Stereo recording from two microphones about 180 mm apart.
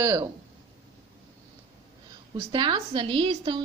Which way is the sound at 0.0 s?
15° right (ahead or behind).